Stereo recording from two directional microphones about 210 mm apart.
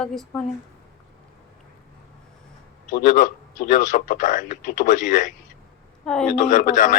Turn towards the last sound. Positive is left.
turn(degrees=40)  # may be behind; listen again after turning